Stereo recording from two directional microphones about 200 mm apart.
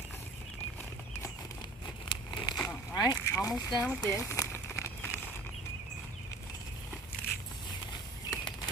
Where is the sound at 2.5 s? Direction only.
10° left (ahead or behind).